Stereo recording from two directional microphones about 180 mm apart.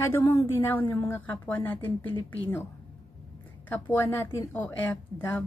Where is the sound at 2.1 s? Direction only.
30° left (ahead or behind).